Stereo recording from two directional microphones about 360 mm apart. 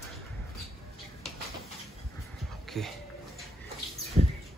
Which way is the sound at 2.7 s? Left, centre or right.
Centre.